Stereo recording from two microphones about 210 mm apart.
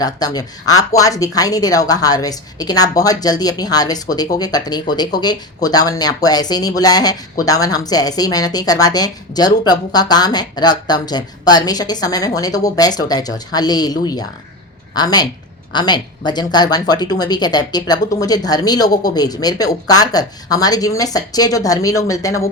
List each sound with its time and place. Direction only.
0.3 s speech: 15° left (ahead or behind)